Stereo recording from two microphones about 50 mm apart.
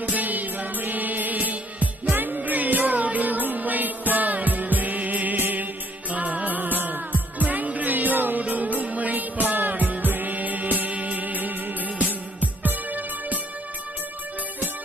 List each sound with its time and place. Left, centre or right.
0.0 s music: right